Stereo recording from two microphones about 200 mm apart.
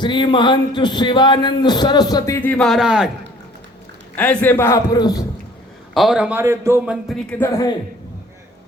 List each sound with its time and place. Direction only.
0.0 s a man's voice: 25° left (ahead or behind); by 3.1 s 5° right (ahead or behind)
4.1 s a man's voice: 5° left (ahead or behind)
5.9 s a man's voice: centre (ahead or behind)
7.3 s a man's voice: 10° left (ahead or behind)